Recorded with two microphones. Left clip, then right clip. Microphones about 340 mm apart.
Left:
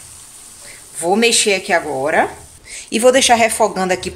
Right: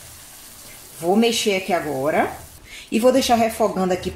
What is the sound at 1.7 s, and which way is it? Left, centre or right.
Speech, left.